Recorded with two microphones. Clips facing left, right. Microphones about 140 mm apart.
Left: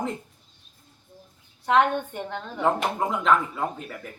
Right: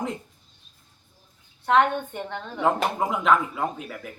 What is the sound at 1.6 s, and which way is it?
Speech, centre (ahead or behind).